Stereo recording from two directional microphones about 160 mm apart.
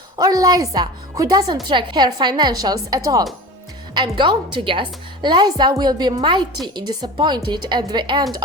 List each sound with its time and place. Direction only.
0.2 s a woman's voice: 20° right (ahead or behind)